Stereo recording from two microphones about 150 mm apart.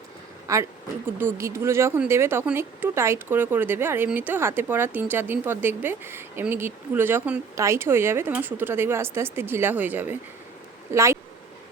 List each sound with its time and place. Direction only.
0.4 s speech: 20° right (ahead or behind)